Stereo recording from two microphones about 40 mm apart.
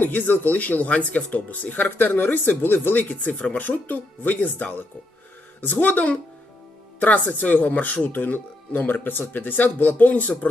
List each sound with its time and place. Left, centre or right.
0.0 s speech: left
3.6 s speech: left